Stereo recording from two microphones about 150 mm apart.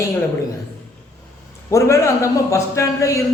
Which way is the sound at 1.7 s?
20° left (ahead or behind).